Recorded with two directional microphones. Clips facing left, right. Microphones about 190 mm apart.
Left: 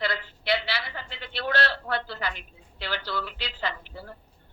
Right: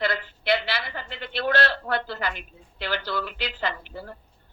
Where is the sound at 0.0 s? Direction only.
50° right (ahead or behind).